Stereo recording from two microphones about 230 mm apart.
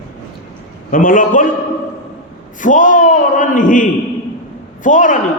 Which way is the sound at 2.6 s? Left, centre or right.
Left.